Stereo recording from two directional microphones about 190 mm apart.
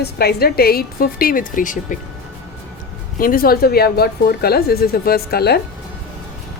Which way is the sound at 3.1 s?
50° left (ahead or behind).